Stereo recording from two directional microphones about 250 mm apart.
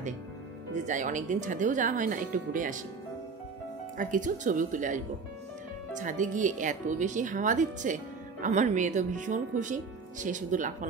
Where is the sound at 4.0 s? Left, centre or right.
Right.